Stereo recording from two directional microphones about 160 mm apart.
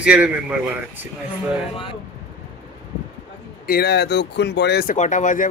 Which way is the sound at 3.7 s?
90° left.